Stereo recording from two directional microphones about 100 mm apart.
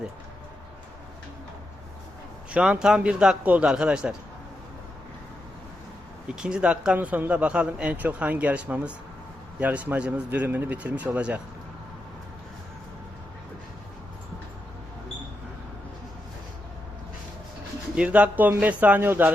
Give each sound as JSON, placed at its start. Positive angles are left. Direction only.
{"t": 2.5, "sound": "a man's voice", "side_deg": -10}
{"t": 6.2, "sound": "a man's voice", "side_deg": -10}
{"t": 17.9, "sound": "a man's voice", "side_deg": -15}